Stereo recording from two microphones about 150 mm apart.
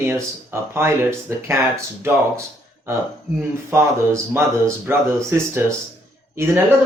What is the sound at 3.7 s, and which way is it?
A woman's voice, 20° right (ahead or behind).